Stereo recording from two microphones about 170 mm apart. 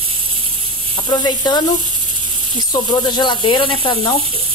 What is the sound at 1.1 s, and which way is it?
Speech, 25° left (ahead or behind).